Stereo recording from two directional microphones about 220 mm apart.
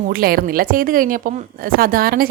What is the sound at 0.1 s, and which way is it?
Speech, 40° right (ahead or behind).